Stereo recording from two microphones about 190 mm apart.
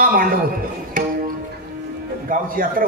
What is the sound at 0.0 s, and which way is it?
Music, 50° right (ahead or behind).